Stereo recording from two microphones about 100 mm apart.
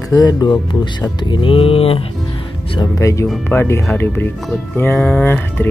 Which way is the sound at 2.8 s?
30° left (ahead or behind).